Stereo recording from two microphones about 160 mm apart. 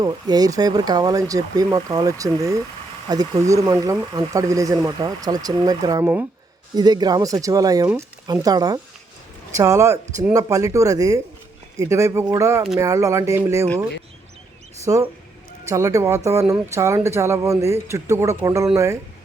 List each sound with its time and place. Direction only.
0.0 s speech: 25° right (ahead or behind)
14.9 s speech: 25° right (ahead or behind)